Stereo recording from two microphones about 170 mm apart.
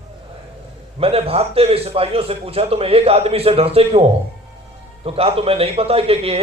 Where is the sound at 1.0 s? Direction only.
35° right (ahead or behind).